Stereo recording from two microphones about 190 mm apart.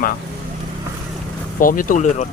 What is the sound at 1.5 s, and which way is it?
Speech, 45° left (ahead or behind).